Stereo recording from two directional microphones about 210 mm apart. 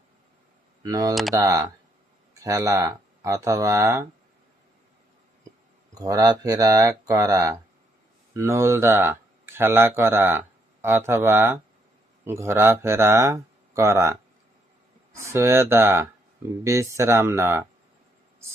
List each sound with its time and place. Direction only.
0.8 s speech: 15° right (ahead or behind)
5.9 s speech: 15° right (ahead or behind)